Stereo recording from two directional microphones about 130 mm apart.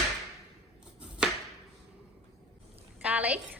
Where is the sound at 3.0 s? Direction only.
10° right (ahead or behind).